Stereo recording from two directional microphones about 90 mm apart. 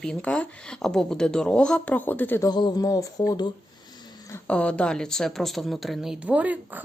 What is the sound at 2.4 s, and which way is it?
Speech, 50° left (ahead or behind).